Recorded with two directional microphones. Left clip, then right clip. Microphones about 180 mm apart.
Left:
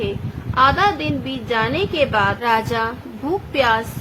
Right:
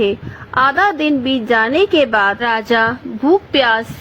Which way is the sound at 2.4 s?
30° right (ahead or behind).